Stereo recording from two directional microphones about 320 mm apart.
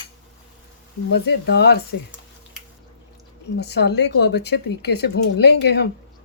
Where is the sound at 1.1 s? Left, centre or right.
Left.